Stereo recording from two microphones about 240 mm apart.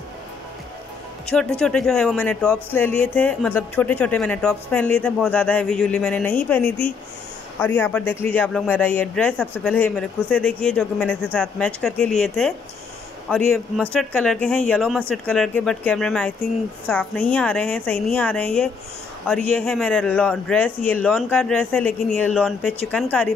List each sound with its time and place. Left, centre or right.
1.2 s speech: centre
13.7 s speech: centre